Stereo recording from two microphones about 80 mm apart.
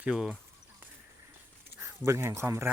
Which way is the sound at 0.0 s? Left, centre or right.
Centre.